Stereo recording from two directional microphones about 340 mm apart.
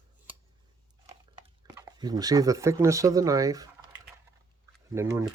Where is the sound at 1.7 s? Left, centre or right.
Centre.